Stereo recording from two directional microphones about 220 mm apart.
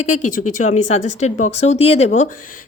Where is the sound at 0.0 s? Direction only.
35° left (ahead or behind).